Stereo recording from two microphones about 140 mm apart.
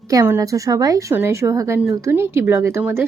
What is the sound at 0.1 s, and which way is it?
A woman's voice, 20° right (ahead or behind).